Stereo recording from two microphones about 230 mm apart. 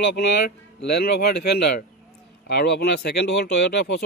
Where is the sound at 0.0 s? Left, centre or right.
Left.